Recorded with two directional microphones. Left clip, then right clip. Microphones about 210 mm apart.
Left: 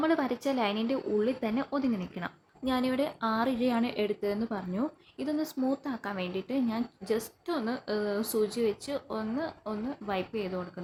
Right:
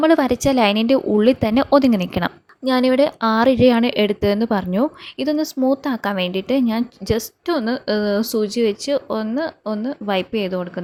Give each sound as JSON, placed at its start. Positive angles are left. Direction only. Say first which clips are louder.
{"t": 0.0, "sound": "a woman's voice", "louder": "right 13 dB", "side_deg": -40}